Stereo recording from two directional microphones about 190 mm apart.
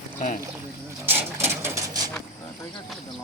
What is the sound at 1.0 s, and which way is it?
Sewing machine, 10° right (ahead or behind).